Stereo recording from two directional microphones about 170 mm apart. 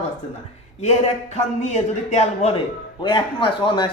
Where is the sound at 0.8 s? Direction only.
40° left (ahead or behind).